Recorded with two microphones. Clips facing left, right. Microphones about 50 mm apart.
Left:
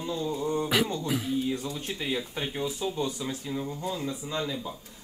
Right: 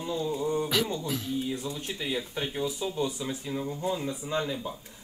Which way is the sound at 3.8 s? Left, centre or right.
Right.